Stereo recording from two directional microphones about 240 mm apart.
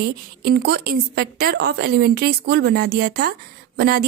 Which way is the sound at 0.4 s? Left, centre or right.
Right.